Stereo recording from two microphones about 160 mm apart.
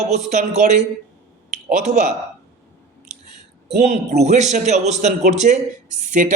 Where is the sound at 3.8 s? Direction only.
45° right (ahead or behind).